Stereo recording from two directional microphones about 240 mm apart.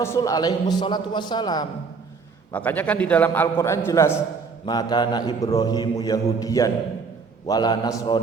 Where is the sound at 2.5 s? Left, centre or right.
Centre.